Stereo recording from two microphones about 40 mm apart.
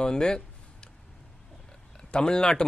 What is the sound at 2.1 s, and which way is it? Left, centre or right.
Speech, left.